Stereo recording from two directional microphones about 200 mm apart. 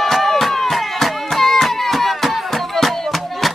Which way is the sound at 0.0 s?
Centre (ahead or behind).